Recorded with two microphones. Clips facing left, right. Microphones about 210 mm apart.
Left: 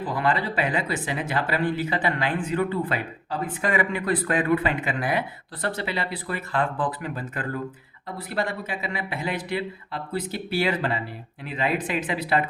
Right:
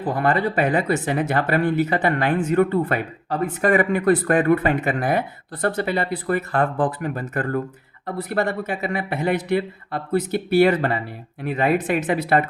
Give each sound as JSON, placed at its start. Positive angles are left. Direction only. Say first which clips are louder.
{"t": 0.0, "sound": "speech", "louder": "right 5 dB", "side_deg": -50}